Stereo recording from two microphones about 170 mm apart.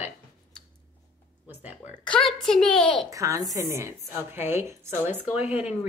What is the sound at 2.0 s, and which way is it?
Speech, 5° left (ahead or behind).